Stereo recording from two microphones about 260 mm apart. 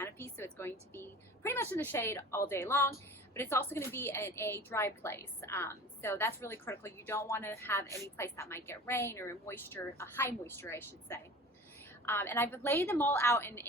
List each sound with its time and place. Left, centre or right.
0.0 s a woman's voice: centre